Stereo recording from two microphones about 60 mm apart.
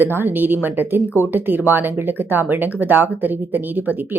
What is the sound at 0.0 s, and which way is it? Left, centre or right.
A woman's voice, right.